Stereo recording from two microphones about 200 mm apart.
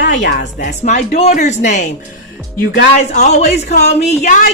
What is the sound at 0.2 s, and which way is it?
Speech, 60° left (ahead or behind).